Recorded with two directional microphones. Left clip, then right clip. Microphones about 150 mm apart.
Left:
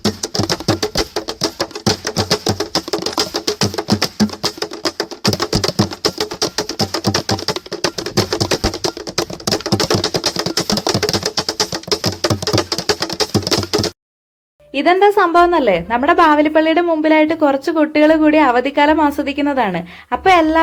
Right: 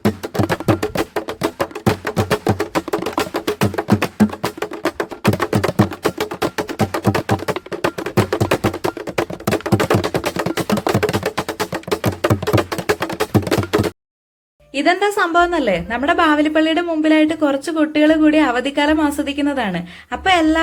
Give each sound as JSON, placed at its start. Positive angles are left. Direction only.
{"t": 0.0, "sound": "music", "side_deg": -25}
{"t": 2.5, "sound": "a sound", "side_deg": -15}
{"t": 2.9, "sound": "music", "side_deg": -20}
{"t": 6.9, "sound": "typing", "side_deg": -25}
{"t": 8.3, "sound": "music", "side_deg": -25}
{"t": 9.5, "sound": "typing", "side_deg": -25}
{"t": 10.5, "sound": "a sound", "side_deg": -25}
{"t": 11.0, "sound": "music", "side_deg": -25}
{"t": 14.8, "sound": "a woman's voice", "side_deg": 0}